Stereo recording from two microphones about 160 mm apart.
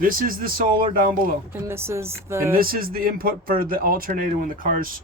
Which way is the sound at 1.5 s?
15° right (ahead or behind).